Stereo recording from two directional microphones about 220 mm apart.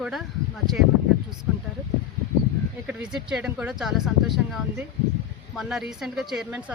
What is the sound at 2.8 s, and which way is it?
Speech, 5° right (ahead or behind).